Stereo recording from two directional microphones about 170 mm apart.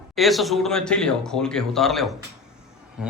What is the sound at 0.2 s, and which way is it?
Speech, centre (ahead or behind).